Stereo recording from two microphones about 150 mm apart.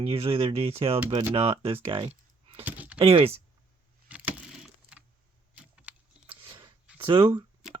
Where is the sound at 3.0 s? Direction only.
40° right (ahead or behind).